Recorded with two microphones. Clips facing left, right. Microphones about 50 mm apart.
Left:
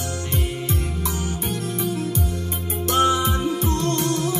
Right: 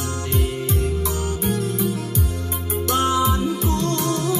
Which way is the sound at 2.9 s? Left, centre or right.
Left.